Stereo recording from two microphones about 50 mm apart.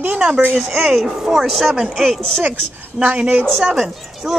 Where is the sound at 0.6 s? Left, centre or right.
Centre.